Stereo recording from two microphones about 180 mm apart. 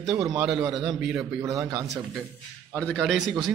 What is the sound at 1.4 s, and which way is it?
Speech, 15° right (ahead or behind).